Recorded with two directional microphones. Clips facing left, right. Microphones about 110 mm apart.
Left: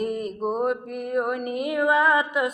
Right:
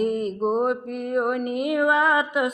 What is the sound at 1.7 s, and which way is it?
Mantra, 25° right (ahead or behind).